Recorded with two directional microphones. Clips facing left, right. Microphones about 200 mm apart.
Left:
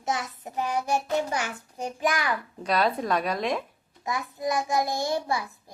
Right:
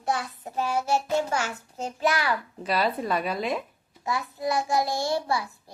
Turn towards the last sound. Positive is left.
turn(degrees=15)  # may be behind; listen again after turning